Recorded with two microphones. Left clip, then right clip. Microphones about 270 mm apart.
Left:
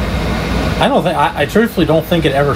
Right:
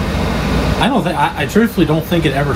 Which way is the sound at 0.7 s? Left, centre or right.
Left.